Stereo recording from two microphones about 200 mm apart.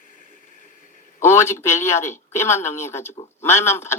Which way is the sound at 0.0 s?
40° left (ahead or behind).